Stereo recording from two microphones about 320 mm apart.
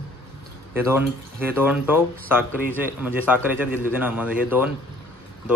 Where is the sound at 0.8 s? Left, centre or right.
Centre.